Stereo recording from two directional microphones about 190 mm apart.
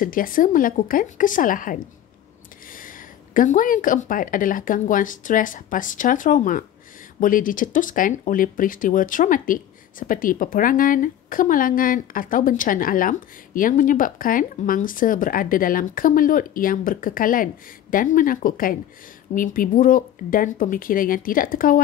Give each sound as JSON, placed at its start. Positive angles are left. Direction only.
{"t": 0.0, "sound": "speech", "side_deg": 45}
{"t": 3.3, "sound": "speech", "side_deg": 45}